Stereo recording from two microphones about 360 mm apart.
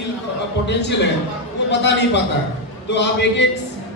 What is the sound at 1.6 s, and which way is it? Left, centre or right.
A man's voice, left.